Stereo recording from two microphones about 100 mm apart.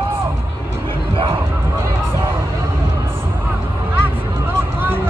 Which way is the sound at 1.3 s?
25° right (ahead or behind).